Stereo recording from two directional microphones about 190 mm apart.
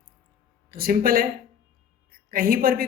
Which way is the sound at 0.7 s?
50° right (ahead or behind).